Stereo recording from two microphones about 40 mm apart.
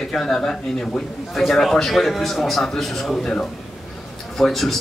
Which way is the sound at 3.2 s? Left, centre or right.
Left.